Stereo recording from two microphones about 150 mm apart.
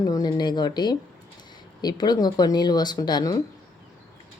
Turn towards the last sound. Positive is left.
turn(degrees=30)  # may be behind; listen again after turning